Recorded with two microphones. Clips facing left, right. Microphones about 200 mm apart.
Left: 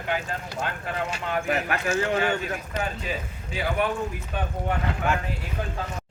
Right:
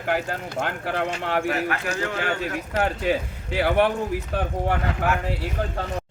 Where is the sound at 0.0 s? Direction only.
70° right (ahead or behind).